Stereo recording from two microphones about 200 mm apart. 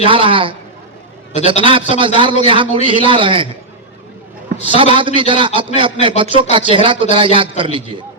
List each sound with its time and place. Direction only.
0.0 s a man's voice: 25° right (ahead or behind)
4.6 s a man's voice: 25° right (ahead or behind)